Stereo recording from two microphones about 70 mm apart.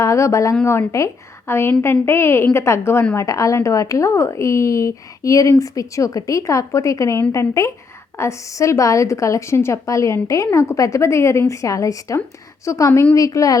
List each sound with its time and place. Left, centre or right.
0.0 s a woman's voice: left